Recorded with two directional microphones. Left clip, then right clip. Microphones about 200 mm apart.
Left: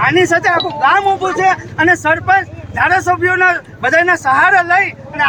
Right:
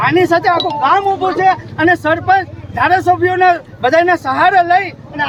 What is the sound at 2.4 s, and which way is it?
Vehicle, 10° right (ahead or behind).